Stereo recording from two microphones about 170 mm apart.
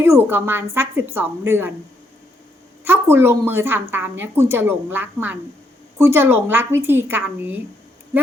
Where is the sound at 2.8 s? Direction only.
15° right (ahead or behind).